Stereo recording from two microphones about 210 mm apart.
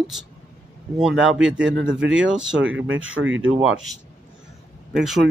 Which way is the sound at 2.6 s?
65° right (ahead or behind).